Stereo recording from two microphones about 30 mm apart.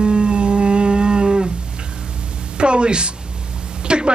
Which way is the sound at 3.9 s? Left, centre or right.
Right.